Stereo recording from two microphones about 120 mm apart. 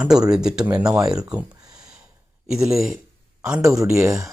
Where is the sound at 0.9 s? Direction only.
30° right (ahead or behind).